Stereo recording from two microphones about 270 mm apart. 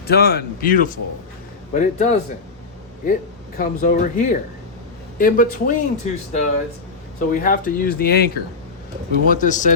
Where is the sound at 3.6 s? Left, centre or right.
Left.